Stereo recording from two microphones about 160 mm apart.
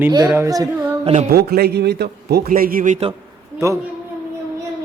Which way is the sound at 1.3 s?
80° right.